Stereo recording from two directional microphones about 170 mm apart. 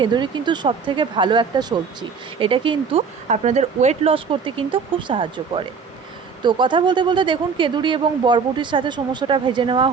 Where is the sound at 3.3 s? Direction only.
40° right (ahead or behind).